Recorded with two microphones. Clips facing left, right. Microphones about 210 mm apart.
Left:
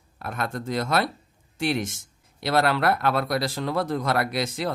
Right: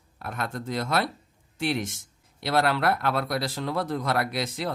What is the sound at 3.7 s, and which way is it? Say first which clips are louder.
Speech: left 3 dB; 45° left (ahead or behind).